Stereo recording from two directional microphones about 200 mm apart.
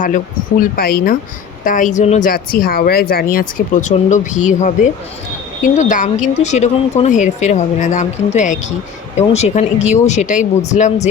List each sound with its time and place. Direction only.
0.6 s a woman's voice: 50° left (ahead or behind)